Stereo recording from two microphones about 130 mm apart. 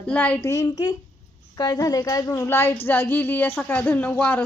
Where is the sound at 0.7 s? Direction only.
35° left (ahead or behind).